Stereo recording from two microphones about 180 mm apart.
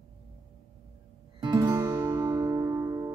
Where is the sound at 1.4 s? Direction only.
20° right (ahead or behind).